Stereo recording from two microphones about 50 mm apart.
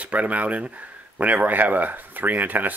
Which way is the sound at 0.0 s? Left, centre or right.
Right.